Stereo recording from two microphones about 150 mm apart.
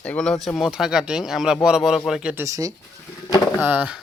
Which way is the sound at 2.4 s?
20° right (ahead or behind).